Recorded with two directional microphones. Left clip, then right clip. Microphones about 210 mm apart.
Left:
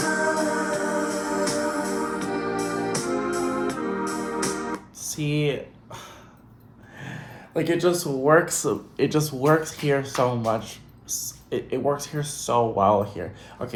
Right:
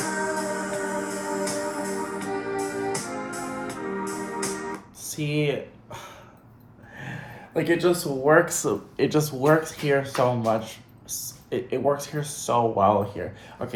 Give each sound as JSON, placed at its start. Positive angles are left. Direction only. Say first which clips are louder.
{"t": 0.0, "sound": "music", "louder": "left 4 dB", "side_deg": 30}
{"t": 5.1, "sound": "a sound", "louder": "even", "side_deg": 10}
{"t": 7.0, "sound": "speech", "louder": "right 1 dB", "side_deg": 10}